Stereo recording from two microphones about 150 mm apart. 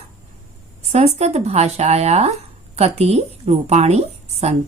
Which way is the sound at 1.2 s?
45° right (ahead or behind).